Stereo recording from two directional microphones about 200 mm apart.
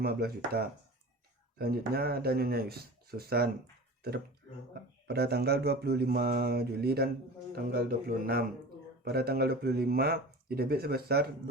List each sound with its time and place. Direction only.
0.0 s speech: 50° right (ahead or behind)
4.7 s speech: 55° right (ahead or behind)